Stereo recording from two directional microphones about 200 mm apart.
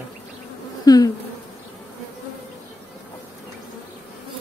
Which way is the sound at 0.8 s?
20° left (ahead or behind).